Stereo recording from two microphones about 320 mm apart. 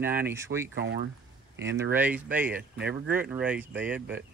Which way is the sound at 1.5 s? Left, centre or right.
Right.